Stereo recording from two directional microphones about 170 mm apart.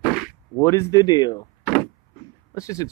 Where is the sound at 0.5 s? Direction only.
15° left (ahead or behind).